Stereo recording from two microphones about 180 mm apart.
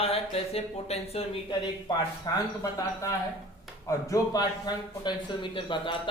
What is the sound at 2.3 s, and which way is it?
Speech, 20° left (ahead or behind).